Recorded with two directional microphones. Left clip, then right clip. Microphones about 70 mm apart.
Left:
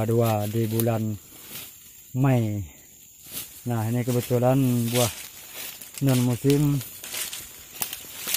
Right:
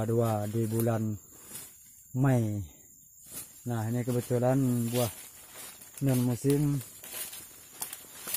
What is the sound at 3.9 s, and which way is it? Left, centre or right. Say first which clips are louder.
Speech: left 5 dB; centre.